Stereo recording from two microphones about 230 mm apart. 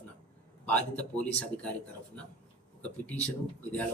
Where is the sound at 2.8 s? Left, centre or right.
Centre.